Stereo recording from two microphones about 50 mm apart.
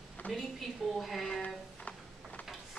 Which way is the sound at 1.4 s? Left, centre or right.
Left.